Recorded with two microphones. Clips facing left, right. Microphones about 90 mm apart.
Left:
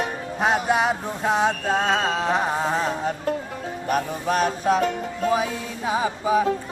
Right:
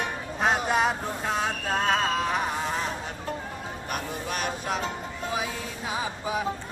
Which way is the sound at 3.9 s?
35° left (ahead or behind).